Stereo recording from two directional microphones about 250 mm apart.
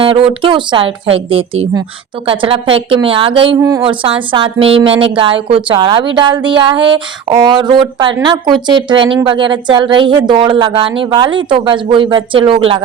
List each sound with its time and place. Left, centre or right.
0.0 s a woman's voice: right